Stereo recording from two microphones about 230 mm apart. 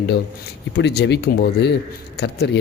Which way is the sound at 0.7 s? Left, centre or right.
Left.